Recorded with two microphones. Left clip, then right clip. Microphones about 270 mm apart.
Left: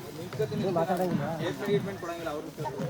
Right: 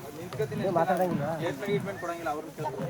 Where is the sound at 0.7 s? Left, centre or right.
Right.